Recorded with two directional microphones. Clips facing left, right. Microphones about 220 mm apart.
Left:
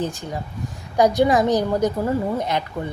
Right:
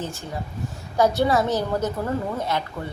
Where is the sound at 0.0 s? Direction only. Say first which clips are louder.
Left 4 dB; 15° left (ahead or behind).